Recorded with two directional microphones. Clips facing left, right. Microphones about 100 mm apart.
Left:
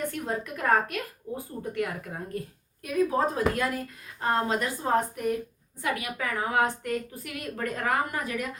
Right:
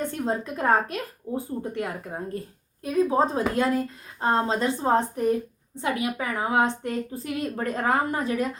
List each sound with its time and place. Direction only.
0.0 s a woman's voice: 25° right (ahead or behind)